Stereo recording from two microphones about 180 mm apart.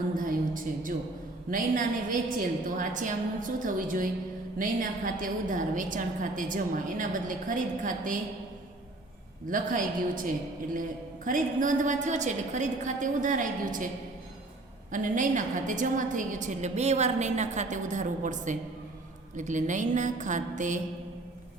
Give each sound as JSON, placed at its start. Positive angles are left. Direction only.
{"t": 0.2, "sound": "a sound", "side_deg": -50}
{"t": 1.5, "sound": "a woman's voice", "side_deg": -50}
{"t": 9.5, "sound": "a woman's voice", "side_deg": -45}
{"t": 11.3, "sound": "a woman's voice", "side_deg": -45}
{"t": 14.9, "sound": "a woman's voice", "side_deg": -45}